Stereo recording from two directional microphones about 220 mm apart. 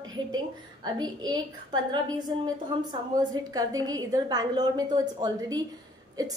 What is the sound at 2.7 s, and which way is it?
A woman's voice, 20° right (ahead or behind).